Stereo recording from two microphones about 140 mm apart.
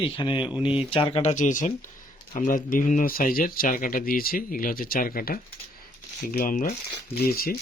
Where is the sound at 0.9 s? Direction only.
40° left (ahead or behind).